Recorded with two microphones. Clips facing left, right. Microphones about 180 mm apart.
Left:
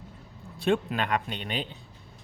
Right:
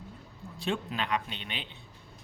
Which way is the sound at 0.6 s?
55° left (ahead or behind).